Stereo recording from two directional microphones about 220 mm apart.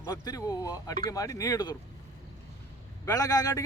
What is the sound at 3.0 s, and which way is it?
Speech, 15° left (ahead or behind).